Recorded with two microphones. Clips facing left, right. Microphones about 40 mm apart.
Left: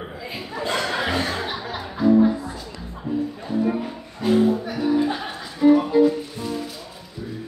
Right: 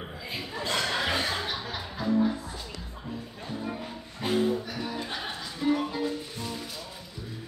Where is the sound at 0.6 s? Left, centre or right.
Centre.